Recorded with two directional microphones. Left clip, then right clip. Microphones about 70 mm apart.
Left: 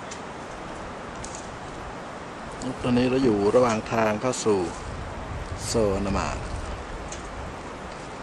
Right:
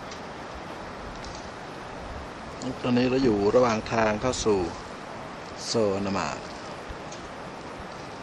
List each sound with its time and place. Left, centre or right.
2.6 s speech: centre
5.7 s speech: centre